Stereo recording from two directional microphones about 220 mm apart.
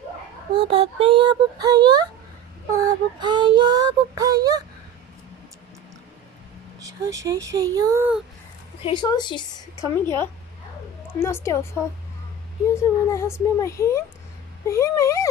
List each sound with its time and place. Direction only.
0.5 s a sound: 25° right (ahead or behind)
2.7 s child singing: 20° right (ahead or behind)
6.8 s child singing: 15° right (ahead or behind)
8.8 s a woman's voice: 20° left (ahead or behind)